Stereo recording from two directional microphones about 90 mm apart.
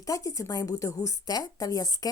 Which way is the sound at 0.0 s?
40° left (ahead or behind).